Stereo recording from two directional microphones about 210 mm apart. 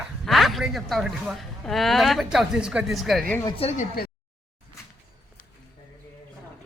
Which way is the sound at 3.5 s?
30° left (ahead or behind).